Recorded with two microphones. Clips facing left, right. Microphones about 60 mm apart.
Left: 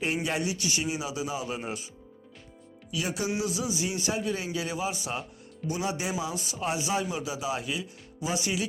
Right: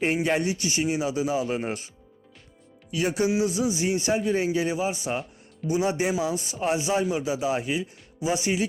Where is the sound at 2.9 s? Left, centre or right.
Right.